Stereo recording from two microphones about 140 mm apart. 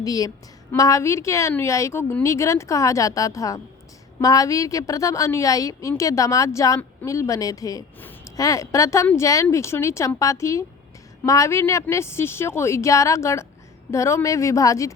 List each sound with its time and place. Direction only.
0.0 s a woman's voice: 25° left (ahead or behind)